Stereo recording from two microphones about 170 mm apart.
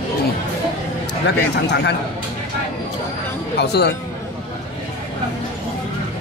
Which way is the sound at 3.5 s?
75° left (ahead or behind).